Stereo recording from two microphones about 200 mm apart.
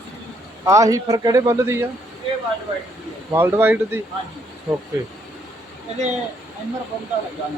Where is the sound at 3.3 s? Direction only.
10° right (ahead or behind).